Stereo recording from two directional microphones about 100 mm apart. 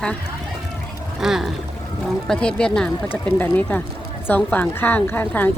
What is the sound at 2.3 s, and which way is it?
Speech, 10° left (ahead or behind).